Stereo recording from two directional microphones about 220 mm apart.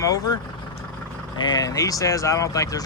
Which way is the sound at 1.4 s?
20° left (ahead or behind).